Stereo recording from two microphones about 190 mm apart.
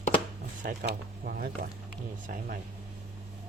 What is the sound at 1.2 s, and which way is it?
Speech, 50° right (ahead or behind).